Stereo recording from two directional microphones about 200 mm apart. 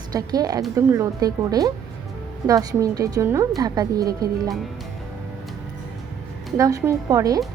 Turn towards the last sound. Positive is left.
turn(degrees=-15)  # may be behind; listen again after turning